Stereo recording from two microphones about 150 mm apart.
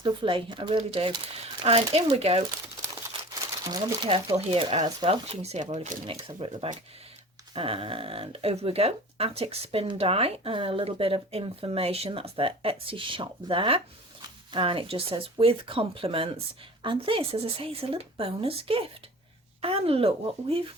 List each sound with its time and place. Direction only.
0.0 s speech: 35° right (ahead or behind)
3.6 s speech: 25° right (ahead or behind)
4.1 s speech: 40° right (ahead or behind)